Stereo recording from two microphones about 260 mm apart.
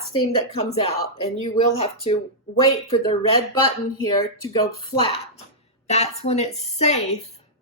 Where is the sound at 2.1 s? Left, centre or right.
Left.